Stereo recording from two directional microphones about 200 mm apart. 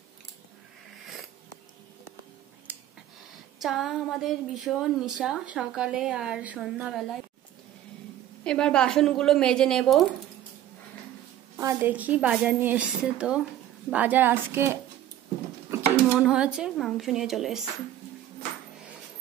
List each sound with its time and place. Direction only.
2.7 s a sound: 10° right (ahead or behind)
3.6 s a woman's voice: centre (ahead or behind)
8.5 s a woman's voice: 5° left (ahead or behind)
11.5 s a woman's voice: 10° right (ahead or behind)